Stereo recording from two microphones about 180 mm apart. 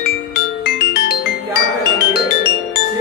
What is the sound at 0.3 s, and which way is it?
Music, 65° left (ahead or behind).